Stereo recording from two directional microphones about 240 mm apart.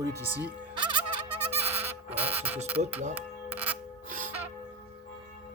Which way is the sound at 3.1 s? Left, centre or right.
Centre.